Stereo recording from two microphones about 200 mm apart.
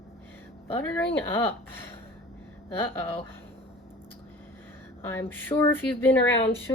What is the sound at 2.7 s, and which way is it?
Speech, 10° left (ahead or behind).